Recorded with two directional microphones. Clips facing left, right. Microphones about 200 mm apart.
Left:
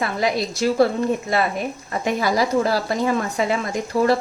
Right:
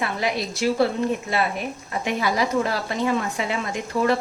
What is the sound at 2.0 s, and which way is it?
Speech, 40° left (ahead or behind).